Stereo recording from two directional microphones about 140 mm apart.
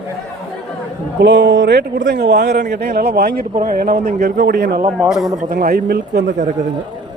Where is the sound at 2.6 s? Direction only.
90° right.